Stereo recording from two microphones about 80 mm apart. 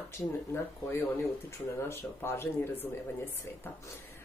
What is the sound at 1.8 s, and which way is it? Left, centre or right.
Speech, left.